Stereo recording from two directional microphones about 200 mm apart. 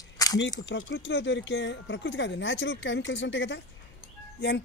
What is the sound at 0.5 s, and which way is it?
Speech, 65° left (ahead or behind).